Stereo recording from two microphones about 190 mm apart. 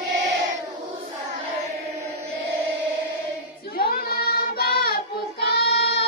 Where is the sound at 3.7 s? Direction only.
50° left (ahead or behind).